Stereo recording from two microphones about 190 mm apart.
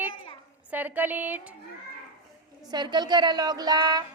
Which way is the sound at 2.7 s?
25° right (ahead or behind).